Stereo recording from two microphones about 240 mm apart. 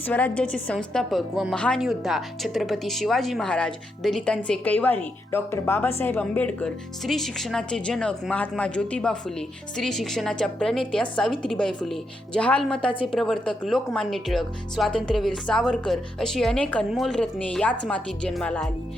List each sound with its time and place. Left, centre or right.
0.1 s a woman's voice: centre